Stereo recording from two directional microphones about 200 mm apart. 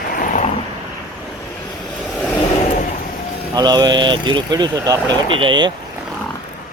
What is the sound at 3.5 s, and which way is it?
Speech, 20° right (ahead or behind).